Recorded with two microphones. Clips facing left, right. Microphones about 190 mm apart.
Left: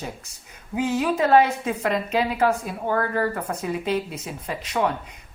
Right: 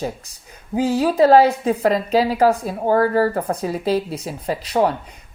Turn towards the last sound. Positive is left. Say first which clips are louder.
# right 6 dB
turn(degrees=-35)  # may be behind; listen again after turning